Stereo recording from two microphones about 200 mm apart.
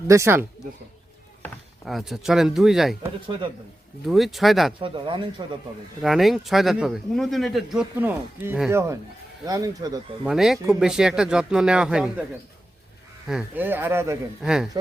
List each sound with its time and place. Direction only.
0.1 s speech: 15° right (ahead or behind)
1.4 s speech: centre (ahead or behind)
3.2 s speech: 25° right (ahead or behind)
4.0 s speech: centre (ahead or behind)
4.8 s speech: 25° right (ahead or behind)
6.0 s speech: centre (ahead or behind)
9.5 s speech: 20° right (ahead or behind)
10.2 s speech: centre (ahead or behind)
13.2 s speech: 5° right (ahead or behind)